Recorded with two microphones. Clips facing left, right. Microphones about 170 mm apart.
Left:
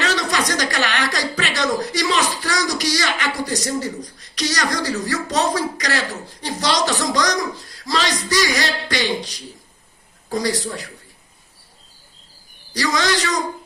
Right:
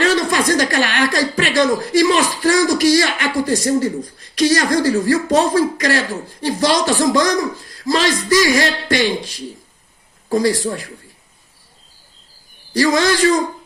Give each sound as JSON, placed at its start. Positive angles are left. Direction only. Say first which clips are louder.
{"t": 0.0, "sound": "a woman's voice", "louder": "right 6 dB", "side_deg": -50}
{"t": 12.7, "sound": "a man's voice", "louder": "right 6 dB", "side_deg": -50}